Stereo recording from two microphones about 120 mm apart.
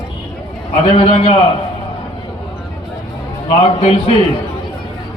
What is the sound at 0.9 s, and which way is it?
Speech, 55° left (ahead or behind).